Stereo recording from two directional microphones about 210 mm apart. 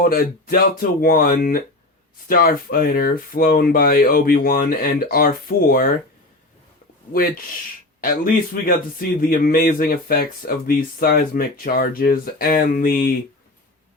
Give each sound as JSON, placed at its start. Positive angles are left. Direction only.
{"t": 0.0, "sound": "a man's voice", "side_deg": 45}
{"t": 7.1, "sound": "a man's voice", "side_deg": 45}